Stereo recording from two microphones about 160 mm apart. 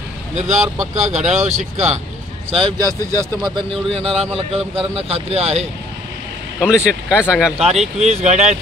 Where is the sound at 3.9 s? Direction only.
40° right (ahead or behind).